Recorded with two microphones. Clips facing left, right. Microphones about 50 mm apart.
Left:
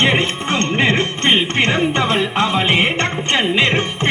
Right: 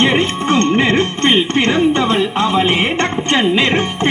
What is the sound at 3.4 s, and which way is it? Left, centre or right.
Music, left.